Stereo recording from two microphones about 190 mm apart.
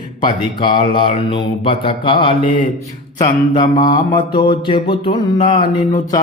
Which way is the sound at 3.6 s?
25° left (ahead or behind).